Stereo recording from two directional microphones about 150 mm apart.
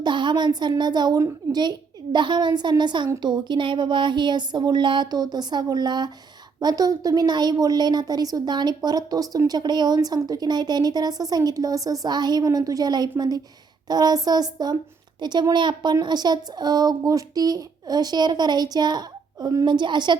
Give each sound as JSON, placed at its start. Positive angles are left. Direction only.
{"t": 0.0, "sound": "a woman's voice", "side_deg": -30}